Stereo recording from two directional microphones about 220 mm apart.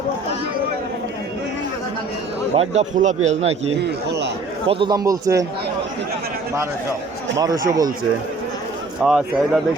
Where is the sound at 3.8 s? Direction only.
50° right (ahead or behind).